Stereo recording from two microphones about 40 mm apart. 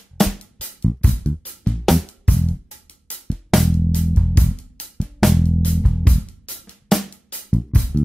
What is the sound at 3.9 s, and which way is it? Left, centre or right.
Music, left.